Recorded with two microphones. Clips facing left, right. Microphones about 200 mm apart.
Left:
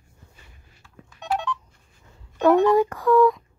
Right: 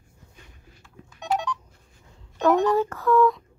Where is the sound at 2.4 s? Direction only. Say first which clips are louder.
Left 3 dB; 10° left (ahead or behind).